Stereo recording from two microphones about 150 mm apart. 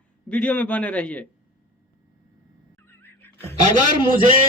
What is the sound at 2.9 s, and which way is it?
Music, 15° left (ahead or behind).